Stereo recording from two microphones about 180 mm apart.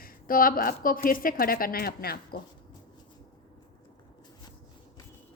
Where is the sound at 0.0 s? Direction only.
55° left (ahead or behind).